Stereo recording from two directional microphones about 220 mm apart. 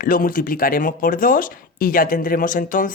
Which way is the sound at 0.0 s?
40° left (ahead or behind).